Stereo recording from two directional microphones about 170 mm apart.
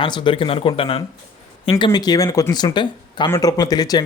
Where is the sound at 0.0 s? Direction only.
25° left (ahead or behind).